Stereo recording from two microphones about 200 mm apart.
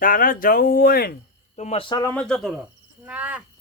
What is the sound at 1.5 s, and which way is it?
Speech, 35° left (ahead or behind).